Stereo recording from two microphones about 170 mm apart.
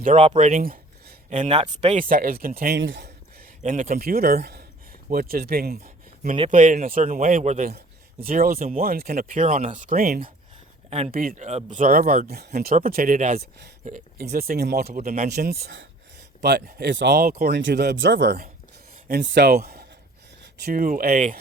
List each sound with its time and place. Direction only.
0.0 s speech: 40° right (ahead or behind); by 3.1 s 80° right
3.6 s speech: 50° right (ahead or behind)
6.5 s a man's voice: 50° right (ahead or behind)
8.2 s speech: 60° right (ahead or behind)
9.1 s a man's voice: 45° right (ahead or behind)
10.8 s speech: 40° right (ahead or behind)
11.1 s speech: 55° right (ahead or behind)
11.4 s speech: 45° right (ahead or behind); by 12.7 s 70° right (ahead or behind)
12.7 s a man's voice: 60° right (ahead or behind)